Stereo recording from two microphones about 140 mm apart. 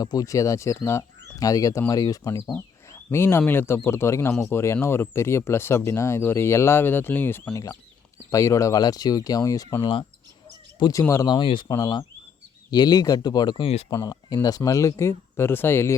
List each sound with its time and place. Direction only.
0.0 s speech: 25° left (ahead or behind)
11.3 s speech: 35° left (ahead or behind); by 16.0 s 15° left (ahead or behind)